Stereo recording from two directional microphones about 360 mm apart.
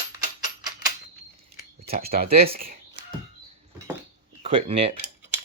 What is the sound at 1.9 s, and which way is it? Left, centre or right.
Speech, right.